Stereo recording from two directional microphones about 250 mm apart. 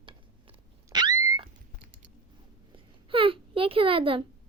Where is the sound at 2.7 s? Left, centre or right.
Right.